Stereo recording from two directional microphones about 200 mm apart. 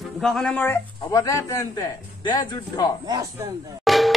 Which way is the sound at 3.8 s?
Centre (ahead or behind).